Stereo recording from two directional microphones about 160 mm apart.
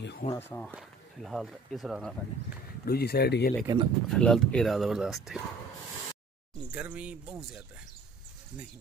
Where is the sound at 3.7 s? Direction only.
25° right (ahead or behind).